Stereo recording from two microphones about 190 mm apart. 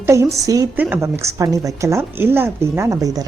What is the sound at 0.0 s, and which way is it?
A woman's voice, 15° right (ahead or behind).